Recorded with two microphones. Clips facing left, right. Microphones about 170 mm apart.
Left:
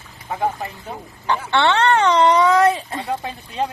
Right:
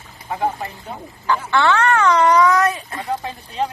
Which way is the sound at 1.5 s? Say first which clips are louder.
Left 1 dB; 30° left (ahead or behind).